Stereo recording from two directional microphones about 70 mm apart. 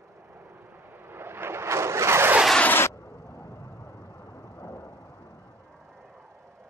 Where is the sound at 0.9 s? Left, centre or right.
Right.